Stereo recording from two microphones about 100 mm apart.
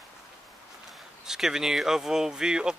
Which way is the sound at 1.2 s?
5° right (ahead or behind).